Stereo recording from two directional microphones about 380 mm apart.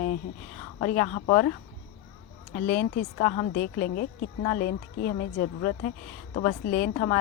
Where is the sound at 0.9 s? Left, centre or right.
Centre.